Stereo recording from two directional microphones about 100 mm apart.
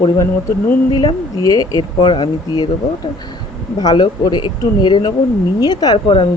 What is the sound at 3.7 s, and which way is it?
Speech, 45° left (ahead or behind).